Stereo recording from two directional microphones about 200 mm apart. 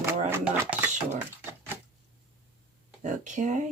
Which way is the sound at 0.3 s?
10° right (ahead or behind).